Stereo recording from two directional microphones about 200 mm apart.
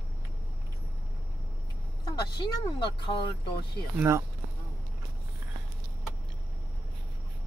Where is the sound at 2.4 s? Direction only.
25° left (ahead or behind).